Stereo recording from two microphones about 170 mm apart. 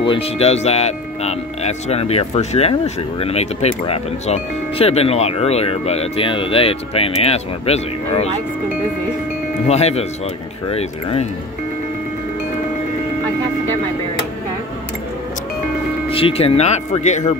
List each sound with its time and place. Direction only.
0.0 s speech: 35° left (ahead or behind)
9.7 s speech: 40° left (ahead or behind)
16.1 s speech: 35° left (ahead or behind)